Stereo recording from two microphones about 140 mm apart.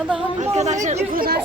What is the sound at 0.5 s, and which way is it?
Speech, 55° right (ahead or behind).